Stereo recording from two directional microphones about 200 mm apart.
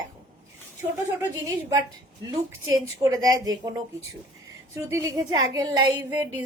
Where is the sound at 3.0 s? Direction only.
20° right (ahead or behind).